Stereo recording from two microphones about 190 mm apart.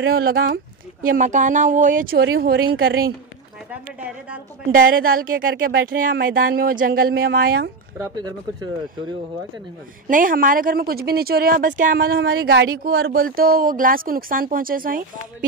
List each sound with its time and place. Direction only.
0.0 s speech: 50° right (ahead or behind)
3.7 s a woman's voice: 5° right (ahead or behind)
5.0 s speech: 50° right (ahead or behind)
8.0 s speech: 20° right (ahead or behind)
10.0 s speech: 45° right (ahead or behind)
12.2 s speech: 60° right (ahead or behind)